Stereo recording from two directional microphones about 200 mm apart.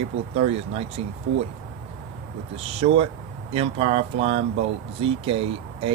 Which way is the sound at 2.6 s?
30° right (ahead or behind).